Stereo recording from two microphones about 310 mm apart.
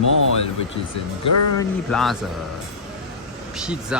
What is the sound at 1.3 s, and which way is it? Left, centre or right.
Speech, left.